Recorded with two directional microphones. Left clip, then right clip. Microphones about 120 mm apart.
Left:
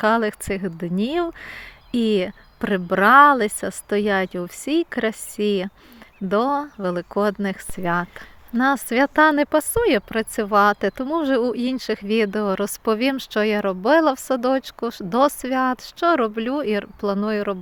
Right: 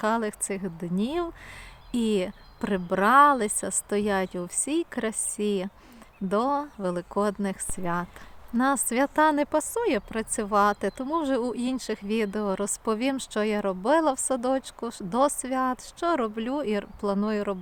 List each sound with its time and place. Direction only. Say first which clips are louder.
0.0 s speech: left 7 dB; 35° left (ahead or behind)